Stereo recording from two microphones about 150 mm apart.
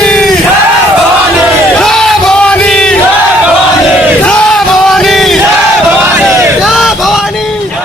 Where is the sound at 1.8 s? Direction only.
5° left (ahead or behind).